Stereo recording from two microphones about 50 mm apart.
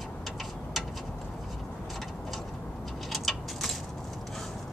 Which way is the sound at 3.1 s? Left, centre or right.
Centre.